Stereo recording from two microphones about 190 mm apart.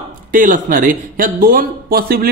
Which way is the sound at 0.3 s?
45° right (ahead or behind).